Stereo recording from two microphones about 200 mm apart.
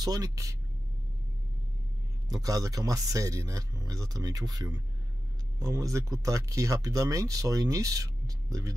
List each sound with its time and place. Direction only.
0.0 s speech: 20° right (ahead or behind)
2.2 s speech: 20° right (ahead or behind)